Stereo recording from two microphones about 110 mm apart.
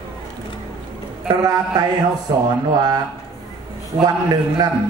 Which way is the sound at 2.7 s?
35° right (ahead or behind).